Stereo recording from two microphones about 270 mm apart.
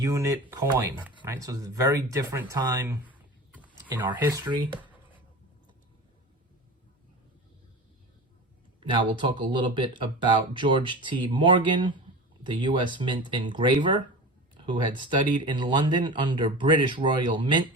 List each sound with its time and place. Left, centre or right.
0.0 s speech: centre
4.0 s speech: centre
8.8 s speech: centre